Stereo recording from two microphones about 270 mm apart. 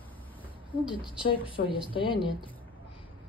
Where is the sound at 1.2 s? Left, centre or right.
Centre.